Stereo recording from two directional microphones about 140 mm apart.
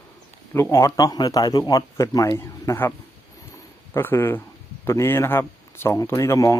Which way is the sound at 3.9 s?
15° left (ahead or behind).